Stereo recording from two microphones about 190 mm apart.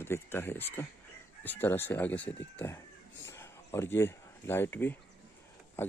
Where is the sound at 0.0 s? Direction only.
10° left (ahead or behind).